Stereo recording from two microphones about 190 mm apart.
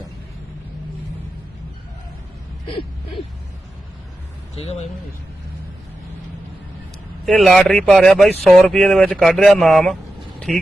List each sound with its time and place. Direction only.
4.5 s speech: 35° left (ahead or behind)
7.3 s speech: centre (ahead or behind)